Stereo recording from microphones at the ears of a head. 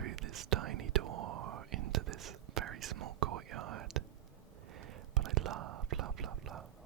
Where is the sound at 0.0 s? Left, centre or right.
Right.